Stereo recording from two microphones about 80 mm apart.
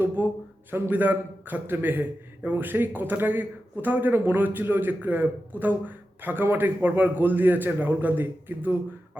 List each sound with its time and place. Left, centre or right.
0.2 s a man's voice: right